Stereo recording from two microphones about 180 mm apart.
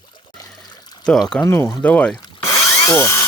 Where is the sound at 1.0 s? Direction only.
5° left (ahead or behind).